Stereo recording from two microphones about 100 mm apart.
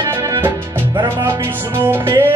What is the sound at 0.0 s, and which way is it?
Music, 30° right (ahead or behind).